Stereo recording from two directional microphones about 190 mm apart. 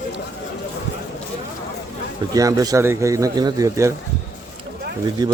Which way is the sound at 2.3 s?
15° right (ahead or behind).